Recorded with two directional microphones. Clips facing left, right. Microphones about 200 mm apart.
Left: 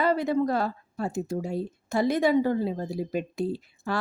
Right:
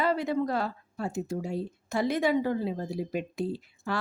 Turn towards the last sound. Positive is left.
turn(degrees=40)  # may be behind; listen again after turning